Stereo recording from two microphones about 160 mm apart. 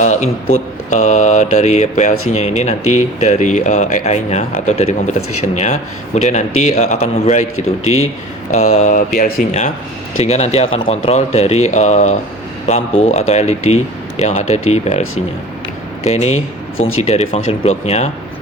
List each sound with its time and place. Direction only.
0.0 s a sound: 50° left (ahead or behind)
0.5 s speech: 50° left (ahead or behind)
8.4 s speech: 45° left (ahead or behind)
16.0 s speech: 40° left (ahead or behind)